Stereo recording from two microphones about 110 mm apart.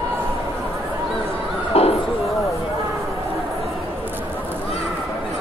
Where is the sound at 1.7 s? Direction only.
65° left (ahead or behind).